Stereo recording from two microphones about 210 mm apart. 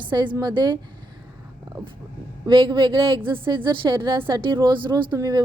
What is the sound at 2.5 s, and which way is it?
A woman's voice, 20° right (ahead or behind).